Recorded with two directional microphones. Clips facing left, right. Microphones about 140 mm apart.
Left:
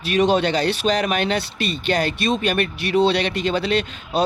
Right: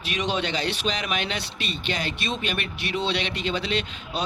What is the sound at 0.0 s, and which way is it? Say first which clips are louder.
Speech: left 9 dB; 40° left (ahead or behind).